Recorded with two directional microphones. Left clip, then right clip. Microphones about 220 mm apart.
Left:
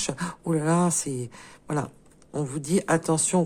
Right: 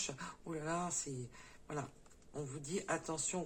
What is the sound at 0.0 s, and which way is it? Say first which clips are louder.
Speech: left 14 dB; 55° left (ahead or behind).